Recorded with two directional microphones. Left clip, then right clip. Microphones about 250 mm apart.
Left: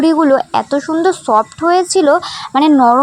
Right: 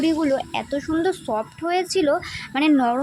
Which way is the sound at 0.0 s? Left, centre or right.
Centre.